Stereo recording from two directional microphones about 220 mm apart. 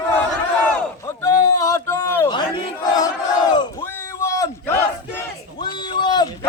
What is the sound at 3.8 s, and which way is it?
Battle cry, 10° left (ahead or behind).